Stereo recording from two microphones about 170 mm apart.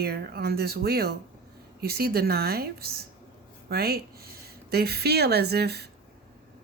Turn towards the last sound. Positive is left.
turn(degrees=-70)  # may be behind; listen again after turning